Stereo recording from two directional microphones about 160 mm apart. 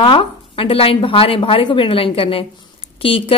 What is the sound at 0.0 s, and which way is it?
A woman's voice, 35° left (ahead or behind).